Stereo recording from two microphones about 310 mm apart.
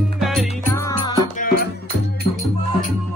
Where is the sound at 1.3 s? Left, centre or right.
Left.